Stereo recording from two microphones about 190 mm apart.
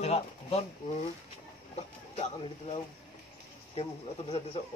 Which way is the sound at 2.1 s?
35° left (ahead or behind).